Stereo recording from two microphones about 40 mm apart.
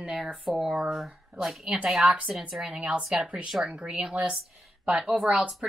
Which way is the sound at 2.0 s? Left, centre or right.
Right.